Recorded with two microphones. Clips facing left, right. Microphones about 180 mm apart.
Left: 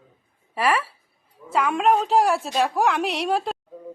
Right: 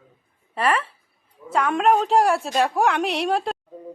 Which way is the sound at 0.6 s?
10° left (ahead or behind).